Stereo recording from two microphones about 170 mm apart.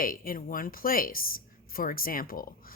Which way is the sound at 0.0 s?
55° left (ahead or behind).